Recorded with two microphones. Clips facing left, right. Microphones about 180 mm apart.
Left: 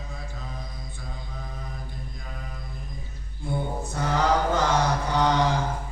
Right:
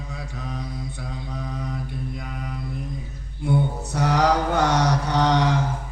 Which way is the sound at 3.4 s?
70° right (ahead or behind).